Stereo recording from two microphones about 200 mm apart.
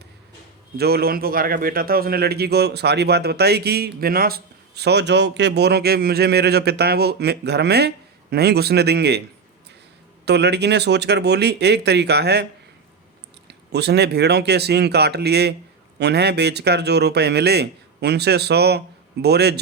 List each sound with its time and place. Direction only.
0.8 s a man's voice: 50° right (ahead or behind)
10.2 s speech: 55° right (ahead or behind)
13.5 s speech: 55° right (ahead or behind)